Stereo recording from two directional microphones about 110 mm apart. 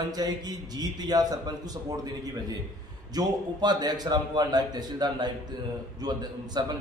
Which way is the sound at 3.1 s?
35° right (ahead or behind).